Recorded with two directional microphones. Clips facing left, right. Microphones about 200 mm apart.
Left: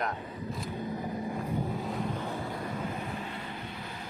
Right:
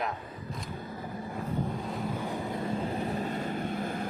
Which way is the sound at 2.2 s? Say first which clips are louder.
Right 2 dB; 15° right (ahead or behind).